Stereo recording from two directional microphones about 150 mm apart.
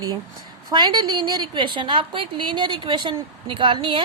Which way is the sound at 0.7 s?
30° right (ahead or behind).